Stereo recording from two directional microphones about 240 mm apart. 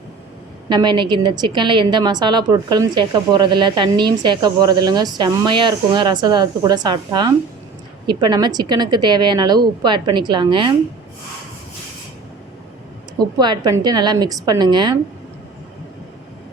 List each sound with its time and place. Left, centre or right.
0.7 s a woman's voice: centre
13.1 s a woman's voice: centre